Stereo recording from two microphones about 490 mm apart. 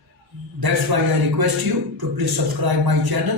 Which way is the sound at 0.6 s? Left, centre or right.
Right.